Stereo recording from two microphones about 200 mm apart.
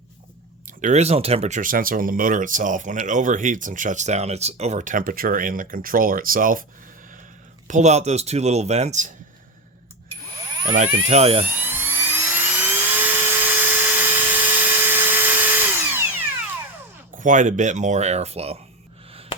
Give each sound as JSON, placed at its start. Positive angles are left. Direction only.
{"t": 0.8, "sound": "speech", "side_deg": -35}
{"t": 7.7, "sound": "speech", "side_deg": -35}
{"t": 10.8, "sound": "speech", "side_deg": -30}
{"t": 11.6, "sound": "helicopter", "side_deg": -10}
{"t": 17.2, "sound": "speech", "side_deg": -40}